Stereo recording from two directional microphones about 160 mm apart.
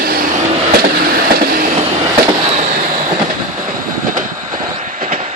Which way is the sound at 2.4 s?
40° right (ahead or behind).